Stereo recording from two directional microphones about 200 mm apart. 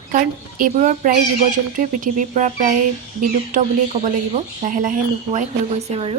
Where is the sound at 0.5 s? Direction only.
40° right (ahead or behind).